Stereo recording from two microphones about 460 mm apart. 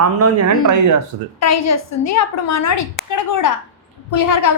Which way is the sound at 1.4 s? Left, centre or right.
Left.